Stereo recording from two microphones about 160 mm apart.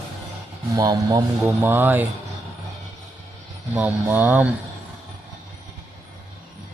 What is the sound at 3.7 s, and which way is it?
Speech, 10° right (ahead or behind).